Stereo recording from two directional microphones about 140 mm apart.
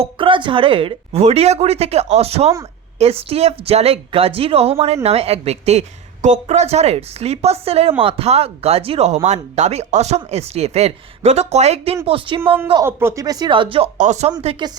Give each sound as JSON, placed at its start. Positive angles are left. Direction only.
{"t": 0.0, "sound": "speech", "side_deg": -35}
{"t": 12.0, "sound": "speech", "side_deg": -40}
{"t": 12.8, "sound": "speech", "side_deg": -15}
{"t": 14.0, "sound": "speech", "side_deg": -55}
{"t": 14.4, "sound": "speech", "side_deg": -40}